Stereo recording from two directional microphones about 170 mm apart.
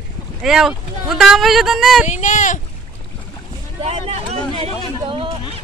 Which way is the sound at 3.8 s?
40° right (ahead or behind).